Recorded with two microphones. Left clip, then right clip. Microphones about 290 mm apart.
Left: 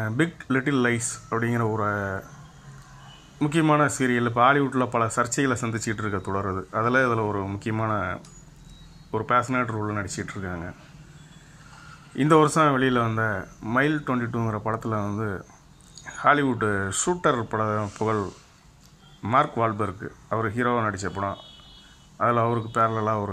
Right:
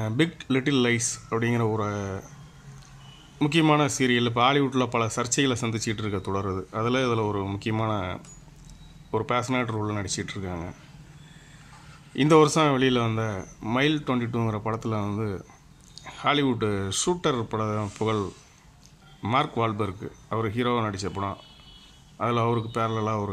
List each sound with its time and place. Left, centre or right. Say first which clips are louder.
0.0 s speech: even; centre
3.3 s speech: left 1 dB; centre
12.2 s speech: even; centre